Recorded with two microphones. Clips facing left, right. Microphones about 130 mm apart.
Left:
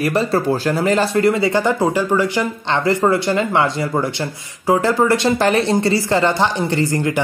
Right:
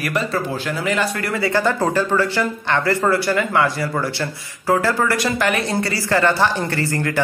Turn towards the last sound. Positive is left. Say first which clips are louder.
# left 3 dB
turn(degrees=20)  # may be behind; listen again after turning